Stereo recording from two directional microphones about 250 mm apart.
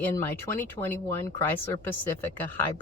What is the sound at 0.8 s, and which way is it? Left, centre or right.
Speech, centre.